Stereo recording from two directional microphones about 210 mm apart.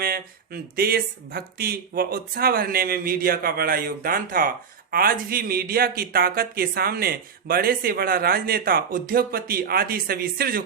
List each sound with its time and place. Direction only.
0.0 s speech: 45° right (ahead or behind)